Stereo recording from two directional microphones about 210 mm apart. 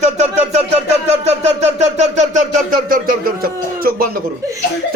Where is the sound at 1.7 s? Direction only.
35° right (ahead or behind).